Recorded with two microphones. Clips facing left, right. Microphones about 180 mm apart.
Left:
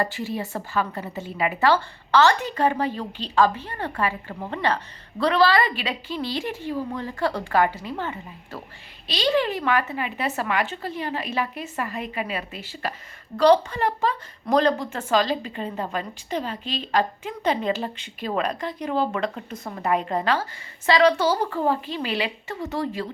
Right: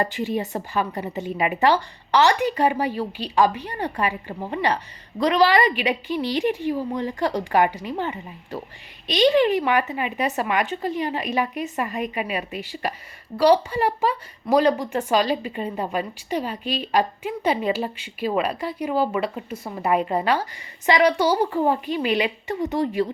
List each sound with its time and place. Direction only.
0.0 s speech: 20° right (ahead or behind)